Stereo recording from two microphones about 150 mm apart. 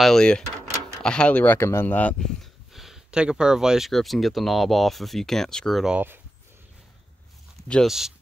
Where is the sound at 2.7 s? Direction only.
Centre (ahead or behind).